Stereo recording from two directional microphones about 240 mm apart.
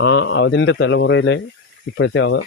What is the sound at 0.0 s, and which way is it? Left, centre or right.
Speech, left.